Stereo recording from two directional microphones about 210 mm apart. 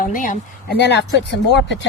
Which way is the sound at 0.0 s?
40° left (ahead or behind).